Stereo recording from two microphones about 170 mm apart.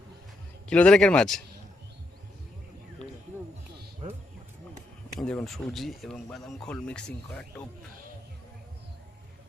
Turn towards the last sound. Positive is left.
turn(degrees=5)  # may be behind; listen again after turning